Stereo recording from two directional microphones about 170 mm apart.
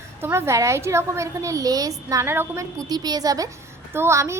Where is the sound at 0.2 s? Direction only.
15° right (ahead or behind).